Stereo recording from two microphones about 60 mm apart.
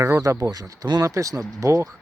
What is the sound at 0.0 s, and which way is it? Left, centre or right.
Speech, right.